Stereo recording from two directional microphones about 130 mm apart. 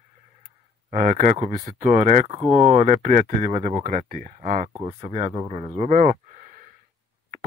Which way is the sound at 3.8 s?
90° right.